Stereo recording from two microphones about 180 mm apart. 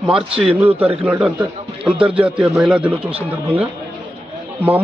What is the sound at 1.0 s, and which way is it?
Speech, 10° right (ahead or behind).